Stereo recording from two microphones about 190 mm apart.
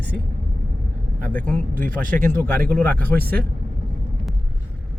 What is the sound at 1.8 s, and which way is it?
Speech, 45° right (ahead or behind).